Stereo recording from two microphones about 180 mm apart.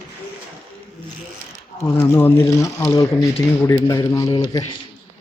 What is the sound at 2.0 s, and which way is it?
Speech, 10° left (ahead or behind).